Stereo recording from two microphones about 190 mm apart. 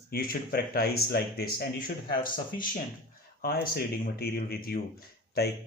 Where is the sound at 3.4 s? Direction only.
55° left (ahead or behind).